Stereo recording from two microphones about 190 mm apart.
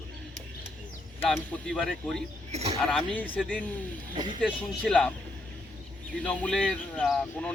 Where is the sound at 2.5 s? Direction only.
35° right (ahead or behind).